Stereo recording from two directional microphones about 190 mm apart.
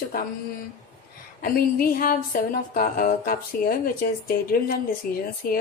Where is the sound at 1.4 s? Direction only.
50° left (ahead or behind).